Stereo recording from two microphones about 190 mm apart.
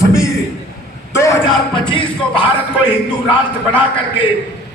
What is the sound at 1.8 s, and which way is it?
Music, 25° left (ahead or behind).